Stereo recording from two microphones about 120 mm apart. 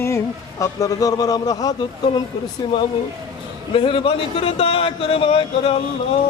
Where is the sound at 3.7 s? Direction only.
50° left (ahead or behind).